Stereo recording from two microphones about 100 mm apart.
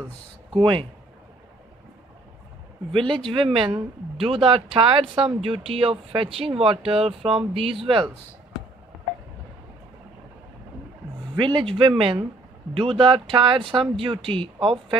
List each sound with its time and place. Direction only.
0.5 s speech: 50° right (ahead or behind)
2.9 s speech: 60° right (ahead or behind); by 7.7 s 80° right
7.8 s speech: 60° right (ahead or behind)
11.3 s speech: 55° right (ahead or behind)